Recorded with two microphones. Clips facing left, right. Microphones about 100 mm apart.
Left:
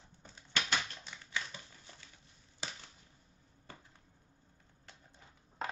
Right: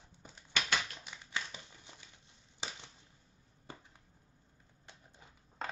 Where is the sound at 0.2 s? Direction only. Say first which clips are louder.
Even; 15° right (ahead or behind).